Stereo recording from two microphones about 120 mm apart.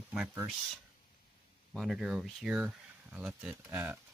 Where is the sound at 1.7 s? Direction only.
Centre (ahead or behind).